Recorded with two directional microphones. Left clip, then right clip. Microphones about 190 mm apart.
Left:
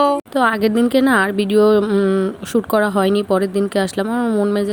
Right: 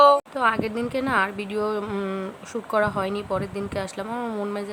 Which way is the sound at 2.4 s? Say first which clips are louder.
Left 5 dB; 35° left (ahead or behind).